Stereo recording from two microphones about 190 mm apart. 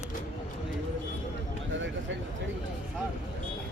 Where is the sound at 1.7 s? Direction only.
80° right.